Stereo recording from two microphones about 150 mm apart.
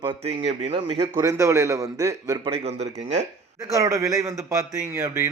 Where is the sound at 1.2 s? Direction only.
20° right (ahead or behind).